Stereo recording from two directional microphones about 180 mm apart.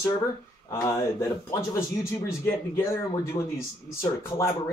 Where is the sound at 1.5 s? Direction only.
15° left (ahead or behind).